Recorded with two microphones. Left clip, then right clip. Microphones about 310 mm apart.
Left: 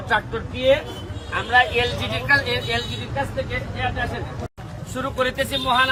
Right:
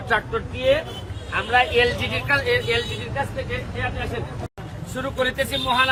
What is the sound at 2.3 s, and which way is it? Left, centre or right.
Speech, centre.